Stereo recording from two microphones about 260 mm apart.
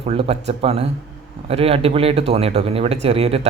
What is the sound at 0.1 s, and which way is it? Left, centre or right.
Speech, right.